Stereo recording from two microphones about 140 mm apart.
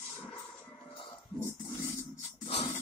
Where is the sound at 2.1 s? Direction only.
50° left (ahead or behind).